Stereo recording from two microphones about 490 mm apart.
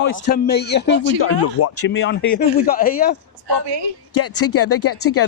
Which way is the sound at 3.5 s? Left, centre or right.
Right.